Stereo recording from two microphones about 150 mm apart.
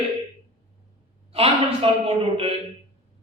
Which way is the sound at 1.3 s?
40° right (ahead or behind).